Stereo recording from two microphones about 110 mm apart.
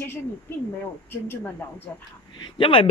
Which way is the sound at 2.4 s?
55° left (ahead or behind).